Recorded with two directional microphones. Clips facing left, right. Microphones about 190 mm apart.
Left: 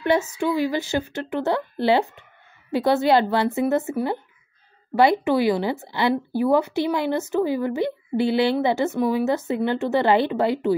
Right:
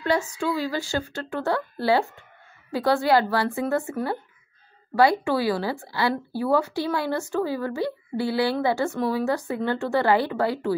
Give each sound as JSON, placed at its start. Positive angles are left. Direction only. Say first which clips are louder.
{"t": 0.0, "sound": "speech", "louder": "left 3 dB", "side_deg": 20}